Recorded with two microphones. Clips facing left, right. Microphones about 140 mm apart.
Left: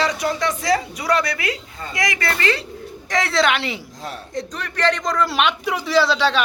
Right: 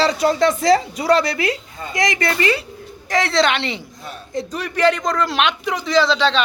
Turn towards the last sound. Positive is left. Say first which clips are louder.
# right 1 dB
turn(degrees=10)  # may be behind; listen again after turning